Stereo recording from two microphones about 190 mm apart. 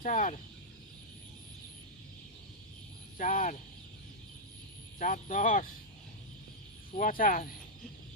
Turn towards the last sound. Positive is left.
turn(degrees=45)  # may be behind; listen again after turning